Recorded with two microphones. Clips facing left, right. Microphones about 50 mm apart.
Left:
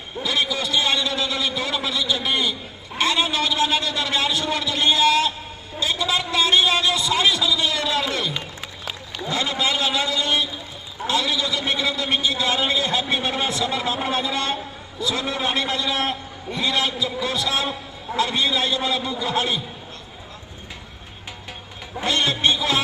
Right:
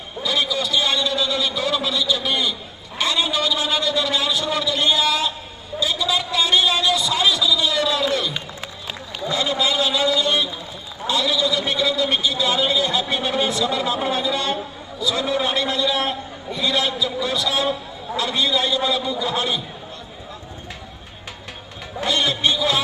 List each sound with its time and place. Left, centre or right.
0.2 s a sound: left
3.0 s a man's voice: left
9.3 s a man's voice: left
22.0 s a man's voice: left